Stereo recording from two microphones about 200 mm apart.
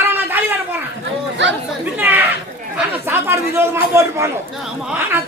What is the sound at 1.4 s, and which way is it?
Speech, 65° right (ahead or behind).